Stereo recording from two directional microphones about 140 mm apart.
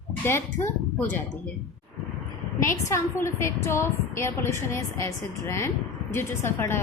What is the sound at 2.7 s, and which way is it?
A woman's voice, 20° left (ahead or behind).